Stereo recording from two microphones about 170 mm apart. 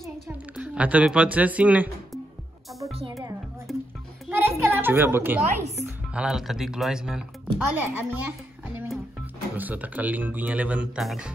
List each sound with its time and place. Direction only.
0.6 s speech: 10° right (ahead or behind)
2.9 s music: 35° right (ahead or behind)
3.7 s music: centre (ahead or behind)
4.4 s a sound: 15° right (ahead or behind)
5.9 s speech: 5° right (ahead or behind)